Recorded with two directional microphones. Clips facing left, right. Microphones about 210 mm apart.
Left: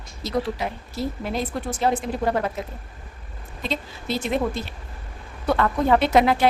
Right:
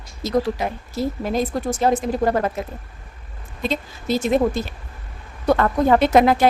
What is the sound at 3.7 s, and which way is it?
A woman's voice, 45° right (ahead or behind).